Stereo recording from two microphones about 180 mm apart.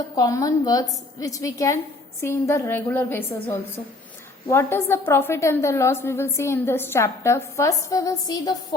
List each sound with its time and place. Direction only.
0.2 s a woman's voice: 20° left (ahead or behind)